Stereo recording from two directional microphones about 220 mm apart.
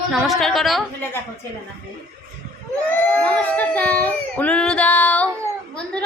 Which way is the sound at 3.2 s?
5° left (ahead or behind).